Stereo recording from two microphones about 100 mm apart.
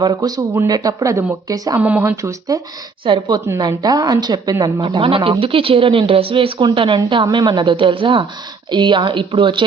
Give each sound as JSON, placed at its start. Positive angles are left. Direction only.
{"t": 0.0, "sound": "speech", "side_deg": -45}
{"t": 1.8, "sound": "speech", "side_deg": -15}
{"t": 2.5, "sound": "speech", "side_deg": -35}
{"t": 3.0, "sound": "a woman's voice", "side_deg": -50}
{"t": 3.6, "sound": "speech", "side_deg": -40}
{"t": 4.6, "sound": "speech", "side_deg": -55}